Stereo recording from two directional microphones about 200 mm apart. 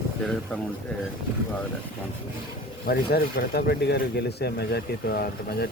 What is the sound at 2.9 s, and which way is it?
Speech, 50° left (ahead or behind).